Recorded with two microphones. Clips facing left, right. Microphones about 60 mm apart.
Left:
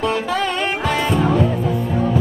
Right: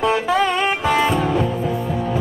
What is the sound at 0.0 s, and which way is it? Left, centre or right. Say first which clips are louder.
Music: right 2 dB; centre.